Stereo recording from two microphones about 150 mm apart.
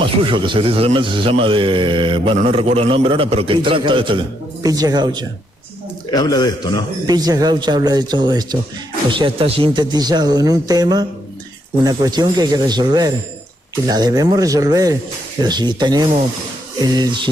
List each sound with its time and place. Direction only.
0.3 s a man's voice: 35° right (ahead or behind)
6.0 s a man's voice: 25° left (ahead or behind)
7.1 s speech: 25° right (ahead or behind)